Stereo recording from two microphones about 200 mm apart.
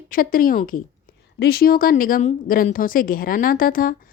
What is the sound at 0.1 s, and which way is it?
Speech, 45° left (ahead or behind).